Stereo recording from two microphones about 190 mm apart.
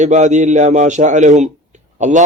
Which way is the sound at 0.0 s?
40° right (ahead or behind).